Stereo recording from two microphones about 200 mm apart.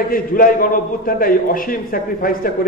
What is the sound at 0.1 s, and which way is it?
A man's voice, 45° left (ahead or behind).